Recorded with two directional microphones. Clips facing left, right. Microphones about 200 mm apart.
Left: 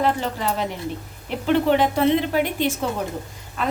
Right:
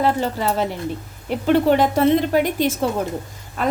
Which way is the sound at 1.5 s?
40° right (ahead or behind).